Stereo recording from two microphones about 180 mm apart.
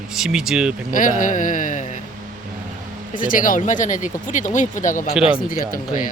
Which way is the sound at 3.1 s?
50° left (ahead or behind).